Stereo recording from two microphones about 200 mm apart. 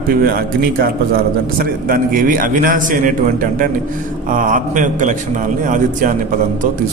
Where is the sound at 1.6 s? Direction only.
45° right (ahead or behind).